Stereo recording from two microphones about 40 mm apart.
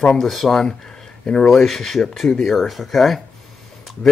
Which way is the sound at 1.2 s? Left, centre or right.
Left.